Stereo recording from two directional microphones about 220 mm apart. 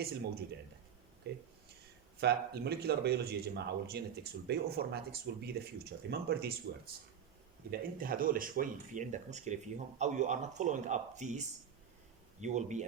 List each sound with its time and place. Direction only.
0.0 s a man's voice: 45° right (ahead or behind)